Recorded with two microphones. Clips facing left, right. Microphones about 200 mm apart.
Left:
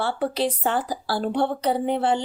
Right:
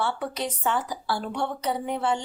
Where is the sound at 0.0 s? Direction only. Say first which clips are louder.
Left 5 dB; 35° left (ahead or behind).